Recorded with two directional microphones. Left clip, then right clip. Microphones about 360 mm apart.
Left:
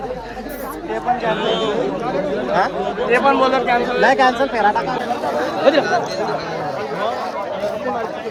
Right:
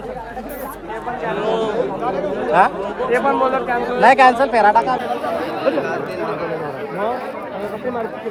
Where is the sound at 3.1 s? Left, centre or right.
Left.